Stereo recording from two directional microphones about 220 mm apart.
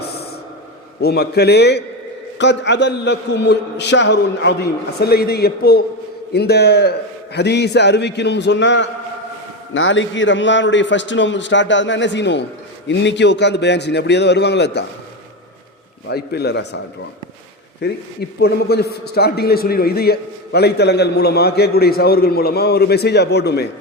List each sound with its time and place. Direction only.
1.0 s a man's voice: 50° left (ahead or behind)
16.0 s a man's voice: 50° left (ahead or behind)
17.8 s a man's voice: 50° left (ahead or behind)